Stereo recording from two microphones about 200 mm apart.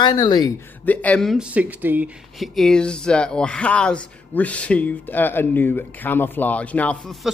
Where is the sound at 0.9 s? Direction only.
5° left (ahead or behind).